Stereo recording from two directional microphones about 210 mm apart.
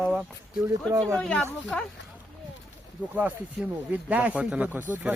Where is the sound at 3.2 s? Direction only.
5° right (ahead or behind).